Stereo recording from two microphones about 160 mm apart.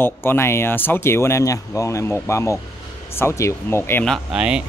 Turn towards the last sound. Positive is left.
turn(degrees=-5)  # may be behind; listen again after turning